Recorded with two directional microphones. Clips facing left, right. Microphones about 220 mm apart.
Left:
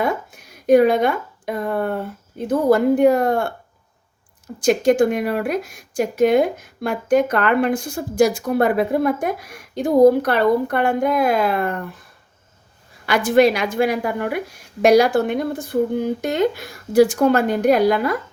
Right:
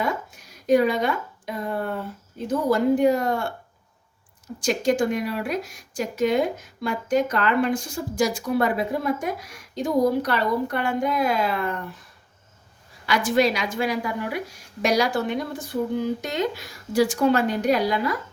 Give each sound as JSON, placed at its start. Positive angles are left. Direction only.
{"t": 0.0, "sound": "a woman's voice", "side_deg": 55}
{"t": 4.6, "sound": "a woman's voice", "side_deg": 55}
{"t": 13.1, "sound": "a woman's voice", "side_deg": 55}